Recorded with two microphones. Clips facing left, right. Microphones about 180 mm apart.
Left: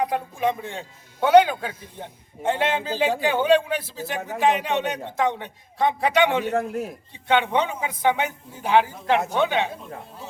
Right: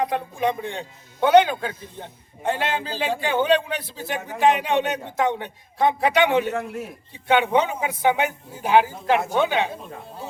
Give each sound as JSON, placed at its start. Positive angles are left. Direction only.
{"t": 0.0, "sound": "a man's voice", "side_deg": 5}
{"t": 2.4, "sound": "a man's voice", "side_deg": 25}
{"t": 6.5, "sound": "a man's voice", "side_deg": 40}
{"t": 7.3, "sound": "a man's voice", "side_deg": -5}